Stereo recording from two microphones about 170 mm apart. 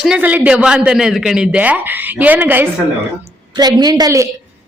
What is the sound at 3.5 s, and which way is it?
Speech, 25° right (ahead or behind).